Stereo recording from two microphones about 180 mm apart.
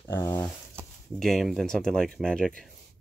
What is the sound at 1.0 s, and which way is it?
Speech, centre (ahead or behind).